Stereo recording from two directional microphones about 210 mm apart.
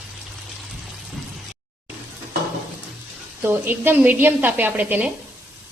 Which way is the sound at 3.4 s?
10° right (ahead or behind).